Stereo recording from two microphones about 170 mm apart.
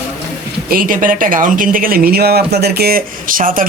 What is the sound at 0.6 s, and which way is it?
Speech, 55° right (ahead or behind).